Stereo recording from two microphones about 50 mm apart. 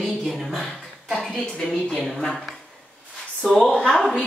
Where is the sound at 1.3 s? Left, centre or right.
Centre.